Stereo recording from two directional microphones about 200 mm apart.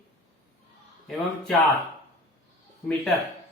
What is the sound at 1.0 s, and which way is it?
Speech, centre (ahead or behind).